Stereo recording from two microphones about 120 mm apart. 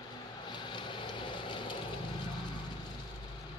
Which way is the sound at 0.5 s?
40° left (ahead or behind).